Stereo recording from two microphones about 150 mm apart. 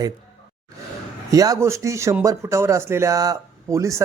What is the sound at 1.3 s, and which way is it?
Speech, 25° right (ahead or behind).